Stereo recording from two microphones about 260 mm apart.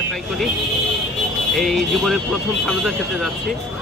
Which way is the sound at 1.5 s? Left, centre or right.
Centre.